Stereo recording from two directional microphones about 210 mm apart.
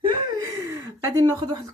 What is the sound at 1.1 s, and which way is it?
Speech, 20° right (ahead or behind).